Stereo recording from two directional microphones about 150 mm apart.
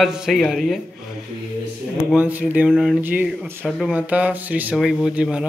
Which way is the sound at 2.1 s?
10° right (ahead or behind).